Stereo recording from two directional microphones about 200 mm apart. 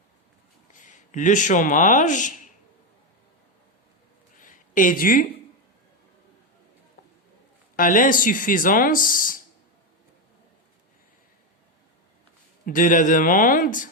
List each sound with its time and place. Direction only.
0.7 s speech: 40° left (ahead or behind)
4.4 s a sound: 40° left (ahead or behind)
7.8 s speech: 40° left (ahead or behind)
12.6 s speech: 40° left (ahead or behind)